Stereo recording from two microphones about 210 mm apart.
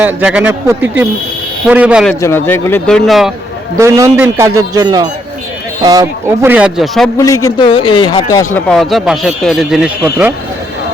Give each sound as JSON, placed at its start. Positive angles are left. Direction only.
{"t": 0.0, "sound": "speech", "side_deg": -5}
{"t": 2.2, "sound": "a man's voice", "side_deg": 10}
{"t": 3.8, "sound": "speech", "side_deg": -15}
{"t": 7.2, "sound": "a man's voice", "side_deg": 15}
{"t": 8.5, "sound": "speech", "side_deg": 0}